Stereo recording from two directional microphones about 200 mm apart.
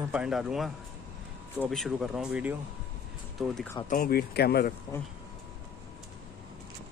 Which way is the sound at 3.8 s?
45° left (ahead or behind).